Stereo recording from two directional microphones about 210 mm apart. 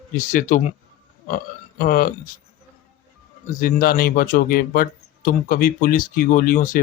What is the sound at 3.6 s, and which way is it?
Speech, 45° left (ahead or behind).